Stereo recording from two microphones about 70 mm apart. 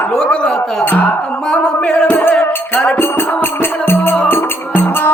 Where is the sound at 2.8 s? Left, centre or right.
Left.